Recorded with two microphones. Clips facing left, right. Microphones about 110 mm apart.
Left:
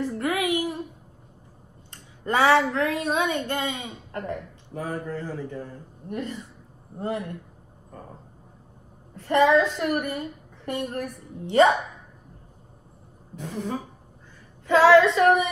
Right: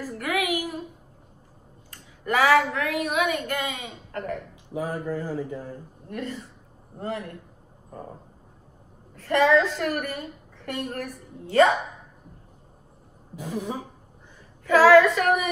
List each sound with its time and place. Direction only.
0.0 s a sound: 30° left (ahead or behind)
1.9 s speech: 30° left (ahead or behind)
4.7 s speech: 5° right (ahead or behind)
6.0 s a woman's voice: 15° left (ahead or behind)
7.0 s child singing: 20° left (ahead or behind)
9.1 s a woman's voice: 15° left (ahead or behind)
13.4 s speech: 10° right (ahead or behind)
14.7 s child singing: 25° left (ahead or behind)